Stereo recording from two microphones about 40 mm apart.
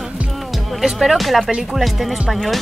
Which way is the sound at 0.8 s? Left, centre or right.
Centre.